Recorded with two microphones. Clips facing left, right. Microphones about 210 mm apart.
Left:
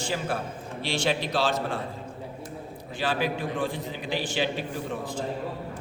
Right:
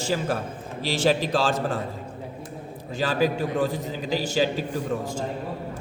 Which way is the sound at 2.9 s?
40° right (ahead or behind).